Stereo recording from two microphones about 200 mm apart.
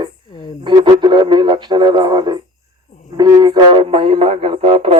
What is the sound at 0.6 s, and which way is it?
Speech, 25° right (ahead or behind).